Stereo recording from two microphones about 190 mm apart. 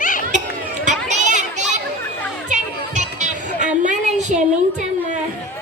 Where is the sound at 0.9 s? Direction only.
40° right (ahead or behind).